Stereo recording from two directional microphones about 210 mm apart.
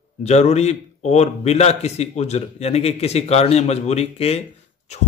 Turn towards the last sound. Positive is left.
turn(degrees=30)  # may be behind; listen again after turning